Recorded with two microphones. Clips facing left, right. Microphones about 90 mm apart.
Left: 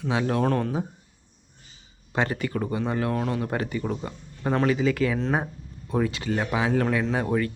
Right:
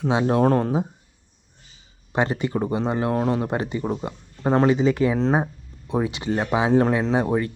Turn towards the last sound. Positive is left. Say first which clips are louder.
# right 3 dB
turn(degrees=-25)  # may be behind; listen again after turning